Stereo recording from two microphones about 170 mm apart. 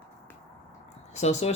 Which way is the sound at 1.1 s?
40° left (ahead or behind).